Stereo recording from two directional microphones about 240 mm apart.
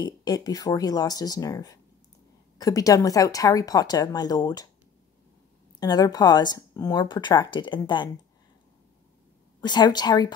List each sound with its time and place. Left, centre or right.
0.0 s a woman's voice: centre
5.8 s a woman's voice: centre
9.6 s a woman's voice: centre